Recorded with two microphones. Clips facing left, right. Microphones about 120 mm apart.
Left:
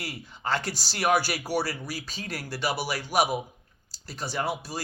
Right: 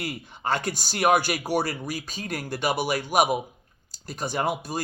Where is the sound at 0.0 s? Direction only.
20° right (ahead or behind).